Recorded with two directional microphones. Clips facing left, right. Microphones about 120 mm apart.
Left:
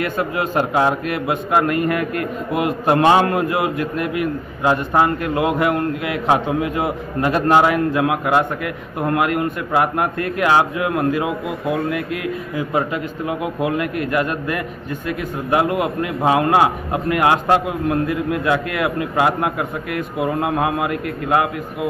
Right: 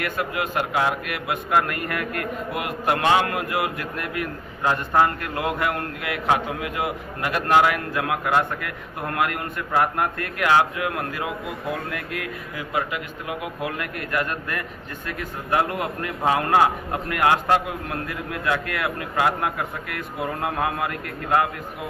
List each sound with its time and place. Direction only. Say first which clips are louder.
0.0 s a man's voice: left 5 dB; 30° left (ahead or behind)
12.7 s a man's voice: left 5 dB; 30° left (ahead or behind)